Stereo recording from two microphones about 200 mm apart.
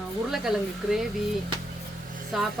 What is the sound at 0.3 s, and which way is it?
Speech, centre (ahead or behind).